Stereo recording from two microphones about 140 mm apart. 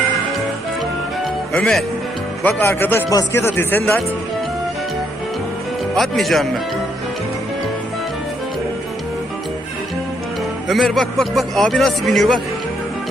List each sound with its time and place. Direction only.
1.5 s speech: 5° left (ahead or behind)
5.9 s speech: centre (ahead or behind)
10.7 s speech: centre (ahead or behind)